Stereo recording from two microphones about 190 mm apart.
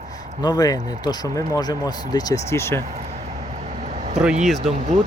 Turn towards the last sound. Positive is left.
turn(degrees=-40)  # may be behind; listen again after turning